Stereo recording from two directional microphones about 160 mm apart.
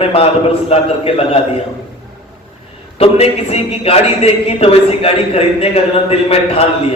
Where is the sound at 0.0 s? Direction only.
35° left (ahead or behind).